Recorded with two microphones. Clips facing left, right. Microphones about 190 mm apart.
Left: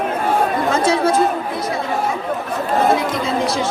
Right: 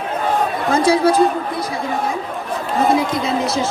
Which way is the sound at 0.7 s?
25° left (ahead or behind).